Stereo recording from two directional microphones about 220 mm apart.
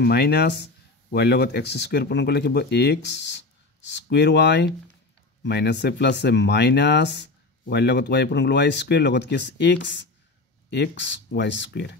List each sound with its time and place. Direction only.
0.0 s speech: 45° left (ahead or behind)